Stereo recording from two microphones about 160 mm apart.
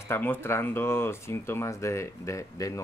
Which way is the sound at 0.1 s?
15° left (ahead or behind).